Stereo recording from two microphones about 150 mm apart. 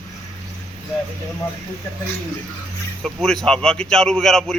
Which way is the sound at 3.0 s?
Centre (ahead or behind).